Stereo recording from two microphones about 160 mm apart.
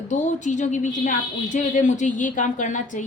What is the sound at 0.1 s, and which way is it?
A woman's voice, 50° left (ahead or behind).